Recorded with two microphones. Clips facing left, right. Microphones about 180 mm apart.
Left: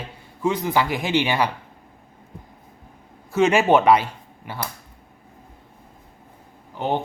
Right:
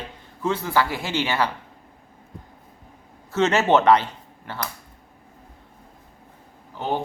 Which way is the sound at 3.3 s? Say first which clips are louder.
Left 2 dB; 10° left (ahead or behind).